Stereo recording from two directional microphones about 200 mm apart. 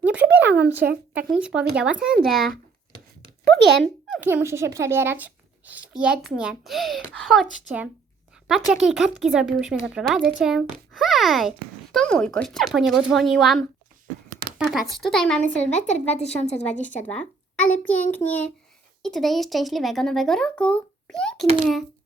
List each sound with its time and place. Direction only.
0.0 s a sound: 10° right (ahead or behind)
0.8 s speech: 50° right (ahead or behind)
1.3 s speech: 5° right (ahead or behind)
3.5 s speech: 60° right (ahead or behind)
4.2 s speech: 10° right (ahead or behind)
15.7 s speech: 35° left (ahead or behind)
16.6 s a child's voice: 5° left (ahead or behind)